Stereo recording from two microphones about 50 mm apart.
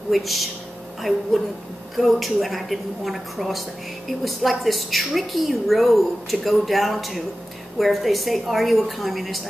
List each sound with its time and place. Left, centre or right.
0.1 s a woman's voice: centre